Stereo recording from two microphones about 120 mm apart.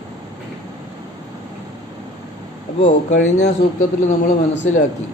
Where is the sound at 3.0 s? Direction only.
80° left.